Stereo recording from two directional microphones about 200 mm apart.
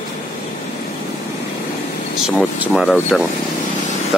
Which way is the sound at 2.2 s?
Centre (ahead or behind).